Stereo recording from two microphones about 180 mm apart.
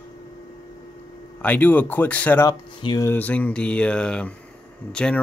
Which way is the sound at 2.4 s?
20° left (ahead or behind).